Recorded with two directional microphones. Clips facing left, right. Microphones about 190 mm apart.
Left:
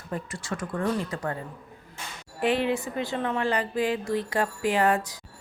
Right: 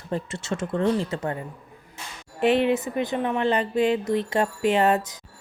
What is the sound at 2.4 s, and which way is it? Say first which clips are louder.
A woman's voice: right 4 dB; 20° right (ahead or behind).